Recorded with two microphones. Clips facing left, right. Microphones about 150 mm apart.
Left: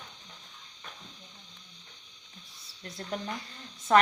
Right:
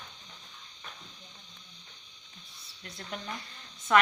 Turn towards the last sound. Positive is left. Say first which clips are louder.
# left 2 dB
turn(degrees=35)  # may be behind; listen again after turning